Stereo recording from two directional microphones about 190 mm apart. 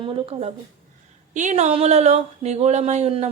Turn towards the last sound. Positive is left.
turn(degrees=-35)  # may be behind; listen again after turning